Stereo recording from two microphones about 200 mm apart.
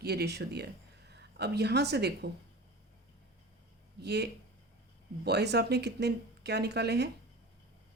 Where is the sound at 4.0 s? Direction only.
55° right (ahead or behind).